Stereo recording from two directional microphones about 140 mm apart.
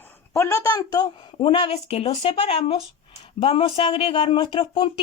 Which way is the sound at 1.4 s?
40° left (ahead or behind).